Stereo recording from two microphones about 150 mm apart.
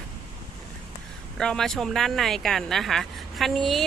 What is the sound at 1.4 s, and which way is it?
Speech, 5° left (ahead or behind).